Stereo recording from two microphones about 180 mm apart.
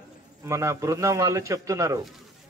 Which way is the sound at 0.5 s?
15° right (ahead or behind).